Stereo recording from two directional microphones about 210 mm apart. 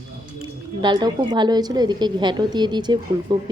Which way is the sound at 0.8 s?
20° right (ahead or behind).